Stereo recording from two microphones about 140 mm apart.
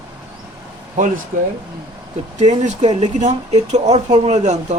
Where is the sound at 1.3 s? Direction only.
70° right (ahead or behind).